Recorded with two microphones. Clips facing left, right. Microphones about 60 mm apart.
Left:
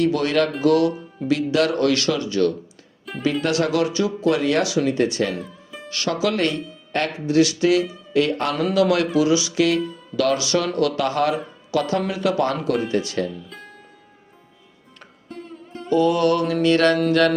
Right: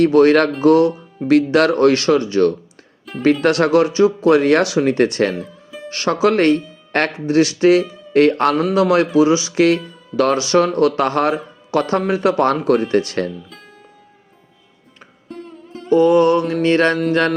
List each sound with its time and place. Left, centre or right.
0.0 s speech: right
1.3 s speech: right
3.1 s music: centre
3.4 s speech: right
5.3 s music: centre
5.9 s speech: right
7.3 s speech: right
8.7 s speech: right
15.3 s music: centre
15.9 s mantra: right
16.6 s speech: right